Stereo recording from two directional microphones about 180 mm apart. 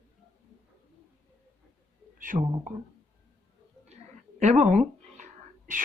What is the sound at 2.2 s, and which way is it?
Speech, 45° right (ahead or behind).